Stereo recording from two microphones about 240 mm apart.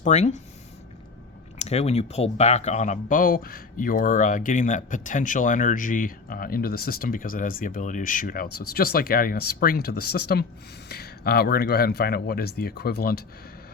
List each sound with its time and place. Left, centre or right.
0.0 s speech: left
1.5 s speech: left